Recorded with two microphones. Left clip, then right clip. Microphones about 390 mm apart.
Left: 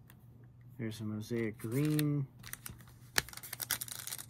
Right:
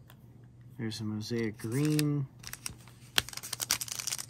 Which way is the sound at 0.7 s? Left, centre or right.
Centre.